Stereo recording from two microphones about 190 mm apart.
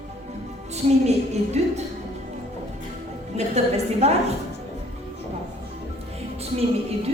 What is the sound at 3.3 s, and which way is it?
Speech, 35° right (ahead or behind).